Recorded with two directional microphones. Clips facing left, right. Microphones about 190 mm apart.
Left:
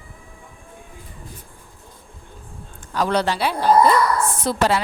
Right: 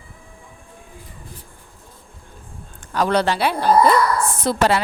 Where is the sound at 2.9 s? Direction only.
60° right (ahead or behind).